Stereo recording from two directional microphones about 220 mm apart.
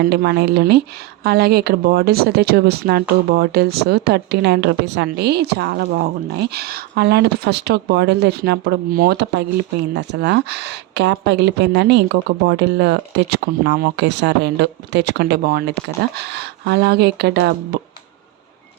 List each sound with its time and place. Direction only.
0.0 s speech: 45° right (ahead or behind)